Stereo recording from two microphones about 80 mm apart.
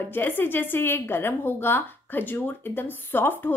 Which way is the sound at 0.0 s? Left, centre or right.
Left.